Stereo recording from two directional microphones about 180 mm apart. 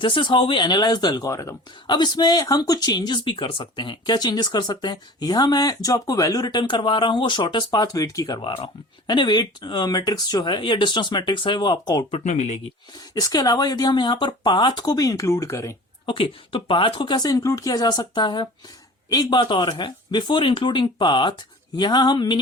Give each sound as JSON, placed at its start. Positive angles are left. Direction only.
{"t": 0.0, "sound": "speech", "side_deg": 25}
{"t": 12.1, "sound": "speech", "side_deg": 40}
{"t": 13.1, "sound": "speech", "side_deg": 20}
{"t": 16.0, "sound": "speech", "side_deg": 30}